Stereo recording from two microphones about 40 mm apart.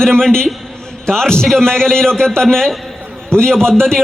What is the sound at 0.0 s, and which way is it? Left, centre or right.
A man's voice, centre.